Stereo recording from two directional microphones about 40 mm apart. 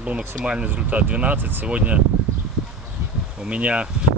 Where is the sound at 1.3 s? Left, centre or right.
Right.